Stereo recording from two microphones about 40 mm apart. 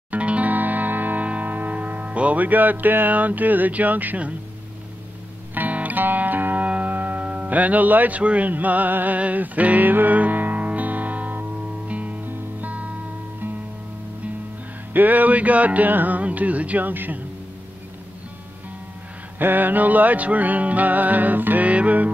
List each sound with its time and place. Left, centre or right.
0.1 s music: right
0.5 s music: right
2.4 s music: right
5.5 s music: right
6.6 s music: right
8.2 s music: right
8.5 s music: right
14.9 s music: right
16.2 s music: right
19.3 s music: right
21.6 s music: right